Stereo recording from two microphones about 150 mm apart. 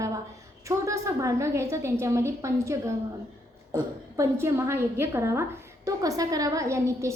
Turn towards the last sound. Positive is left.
turn(degrees=-20)  # may be behind; listen again after turning